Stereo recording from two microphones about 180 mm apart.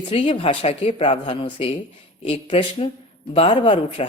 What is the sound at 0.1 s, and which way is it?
Speech, 35° left (ahead or behind).